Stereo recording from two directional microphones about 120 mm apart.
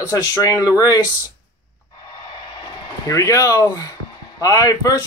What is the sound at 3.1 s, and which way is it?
Speech, 25° left (ahead or behind).